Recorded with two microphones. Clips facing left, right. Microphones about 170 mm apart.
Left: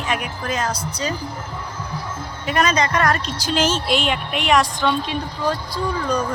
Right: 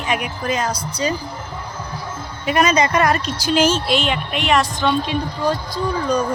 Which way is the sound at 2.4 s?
5° right (ahead or behind).